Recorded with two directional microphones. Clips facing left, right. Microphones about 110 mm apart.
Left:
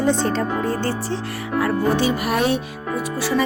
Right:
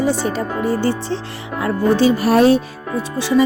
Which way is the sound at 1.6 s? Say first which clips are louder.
Right 4 dB; 30° right (ahead or behind).